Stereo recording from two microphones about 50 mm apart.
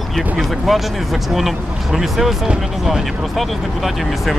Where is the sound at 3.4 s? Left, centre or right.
Centre.